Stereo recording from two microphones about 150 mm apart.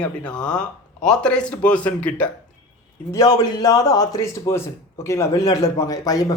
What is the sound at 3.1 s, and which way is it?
Speech, 25° left (ahead or behind).